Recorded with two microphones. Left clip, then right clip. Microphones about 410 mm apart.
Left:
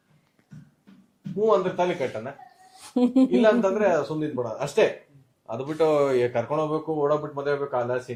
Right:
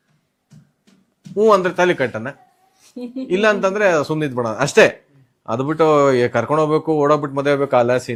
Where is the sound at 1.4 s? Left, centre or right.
Right.